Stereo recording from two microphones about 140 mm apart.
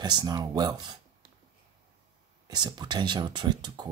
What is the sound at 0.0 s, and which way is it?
Speech, 30° right (ahead or behind).